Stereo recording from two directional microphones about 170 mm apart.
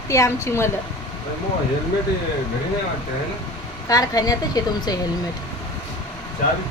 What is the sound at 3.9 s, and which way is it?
A woman's voice, 20° left (ahead or behind).